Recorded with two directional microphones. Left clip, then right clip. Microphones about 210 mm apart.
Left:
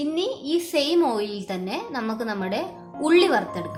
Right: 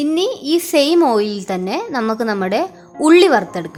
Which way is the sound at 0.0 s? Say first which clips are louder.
Right 8 dB; 45° right (ahead or behind).